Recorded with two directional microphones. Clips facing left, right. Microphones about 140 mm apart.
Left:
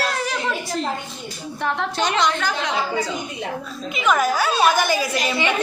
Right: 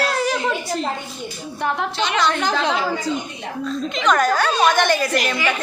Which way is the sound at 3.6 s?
5° left (ahead or behind).